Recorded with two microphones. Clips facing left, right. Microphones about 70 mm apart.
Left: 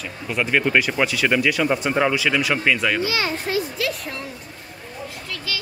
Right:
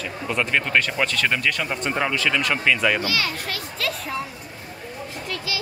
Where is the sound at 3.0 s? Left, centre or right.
Left.